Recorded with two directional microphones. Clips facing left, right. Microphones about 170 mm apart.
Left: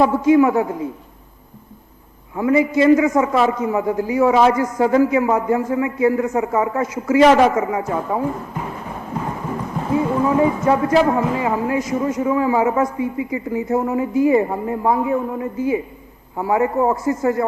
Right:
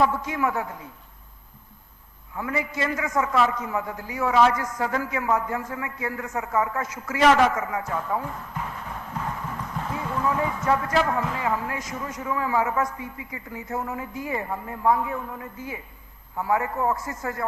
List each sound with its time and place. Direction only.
0.0 s a man's voice: 20° left (ahead or behind)
2.3 s a man's voice: 15° left (ahead or behind)